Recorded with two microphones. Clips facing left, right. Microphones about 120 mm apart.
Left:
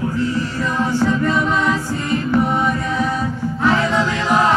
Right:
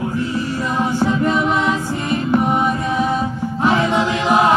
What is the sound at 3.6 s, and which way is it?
Choir, 15° right (ahead or behind).